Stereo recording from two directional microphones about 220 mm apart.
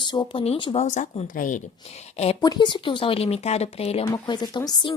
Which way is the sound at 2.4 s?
20° left (ahead or behind).